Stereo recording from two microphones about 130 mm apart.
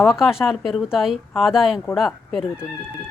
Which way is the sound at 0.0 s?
5° right (ahead or behind).